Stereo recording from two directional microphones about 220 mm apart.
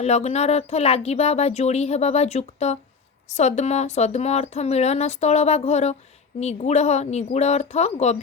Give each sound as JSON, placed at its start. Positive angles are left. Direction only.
{"t": 0.0, "sound": "speech", "side_deg": 30}